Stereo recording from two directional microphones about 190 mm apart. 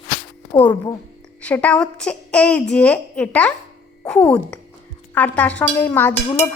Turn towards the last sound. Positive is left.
turn(degrees=10)  # may be behind; listen again after turning